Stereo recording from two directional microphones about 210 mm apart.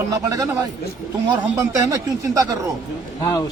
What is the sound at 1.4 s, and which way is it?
Speech, 15° right (ahead or behind).